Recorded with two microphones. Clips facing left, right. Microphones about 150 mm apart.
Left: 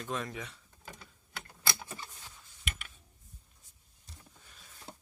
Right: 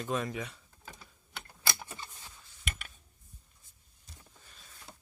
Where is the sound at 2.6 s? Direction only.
45° right (ahead or behind).